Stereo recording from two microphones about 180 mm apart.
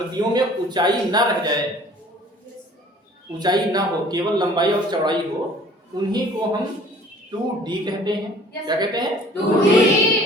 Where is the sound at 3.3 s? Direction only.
20° right (ahead or behind).